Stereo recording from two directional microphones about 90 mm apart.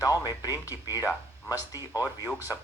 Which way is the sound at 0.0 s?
40° left (ahead or behind).